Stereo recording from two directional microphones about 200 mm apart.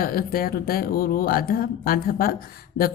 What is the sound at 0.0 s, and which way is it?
Speech, 45° left (ahead or behind).